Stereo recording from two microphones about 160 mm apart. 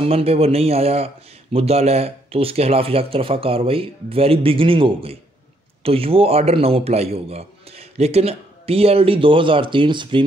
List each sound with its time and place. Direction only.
0.0 s speech: 40° right (ahead or behind)